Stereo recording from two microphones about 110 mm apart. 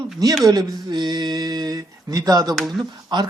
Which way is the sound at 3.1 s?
40° right (ahead or behind).